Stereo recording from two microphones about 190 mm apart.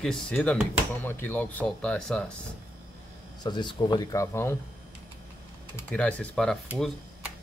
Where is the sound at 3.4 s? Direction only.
25° left (ahead or behind).